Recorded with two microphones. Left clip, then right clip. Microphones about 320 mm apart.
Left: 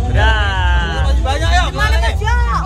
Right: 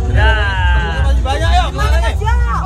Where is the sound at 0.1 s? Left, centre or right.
Centre.